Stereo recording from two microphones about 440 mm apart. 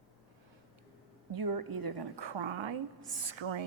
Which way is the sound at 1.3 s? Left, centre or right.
Right.